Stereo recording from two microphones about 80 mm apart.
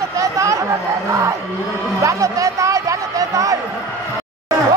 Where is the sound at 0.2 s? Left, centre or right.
Right.